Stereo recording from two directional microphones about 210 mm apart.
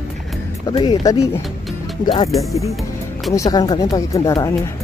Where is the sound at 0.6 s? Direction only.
20° left (ahead or behind).